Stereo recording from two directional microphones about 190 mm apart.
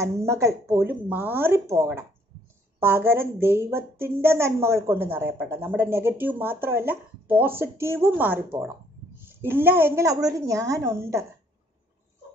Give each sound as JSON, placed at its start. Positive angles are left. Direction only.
{"t": 0.0, "sound": "a woman's voice", "side_deg": -15}